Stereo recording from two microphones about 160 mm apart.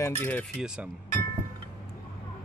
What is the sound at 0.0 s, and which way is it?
Speech, 10° left (ahead or behind).